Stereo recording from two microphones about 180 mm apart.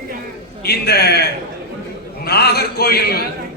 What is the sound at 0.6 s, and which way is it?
A man's voice, 60° left (ahead or behind).